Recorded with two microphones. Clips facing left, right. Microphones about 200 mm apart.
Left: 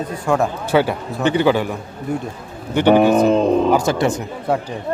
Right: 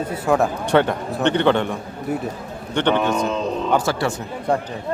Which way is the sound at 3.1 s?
55° left (ahead or behind).